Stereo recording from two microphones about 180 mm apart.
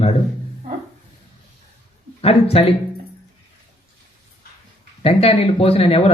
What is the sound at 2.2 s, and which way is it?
Speech, 35° left (ahead or behind).